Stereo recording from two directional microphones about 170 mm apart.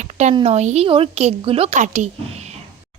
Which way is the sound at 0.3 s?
35° right (ahead or behind).